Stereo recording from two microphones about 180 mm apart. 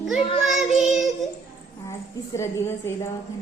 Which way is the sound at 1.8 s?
15° left (ahead or behind).